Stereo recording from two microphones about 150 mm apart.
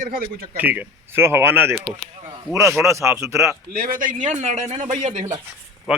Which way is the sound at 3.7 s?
70° right (ahead or behind).